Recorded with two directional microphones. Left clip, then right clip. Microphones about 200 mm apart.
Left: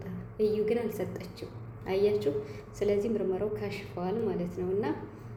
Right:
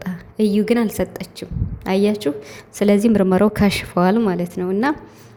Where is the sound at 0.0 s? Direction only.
45° right (ahead or behind).